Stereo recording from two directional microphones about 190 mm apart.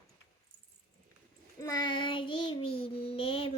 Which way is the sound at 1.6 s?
20° left (ahead or behind).